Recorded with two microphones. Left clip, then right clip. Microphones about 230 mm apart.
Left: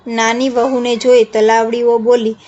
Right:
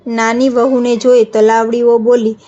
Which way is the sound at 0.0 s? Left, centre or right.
Centre.